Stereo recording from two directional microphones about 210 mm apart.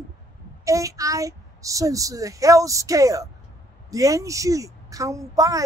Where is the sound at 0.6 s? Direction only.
15° right (ahead or behind).